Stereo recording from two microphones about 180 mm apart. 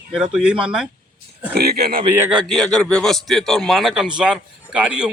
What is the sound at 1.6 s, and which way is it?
Speech, 60° right (ahead or behind).